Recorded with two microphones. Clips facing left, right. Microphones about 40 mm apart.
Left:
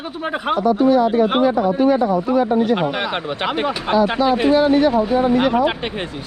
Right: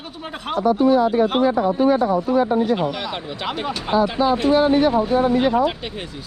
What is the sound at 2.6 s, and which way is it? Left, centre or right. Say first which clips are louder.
Speech: left 2 dB; left.